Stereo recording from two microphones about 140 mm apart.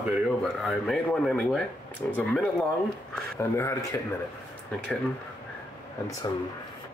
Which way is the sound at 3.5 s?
20° left (ahead or behind).